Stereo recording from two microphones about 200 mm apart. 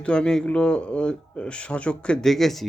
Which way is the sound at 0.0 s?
5° left (ahead or behind).